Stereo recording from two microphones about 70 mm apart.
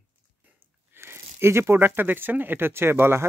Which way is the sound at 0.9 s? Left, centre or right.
Right.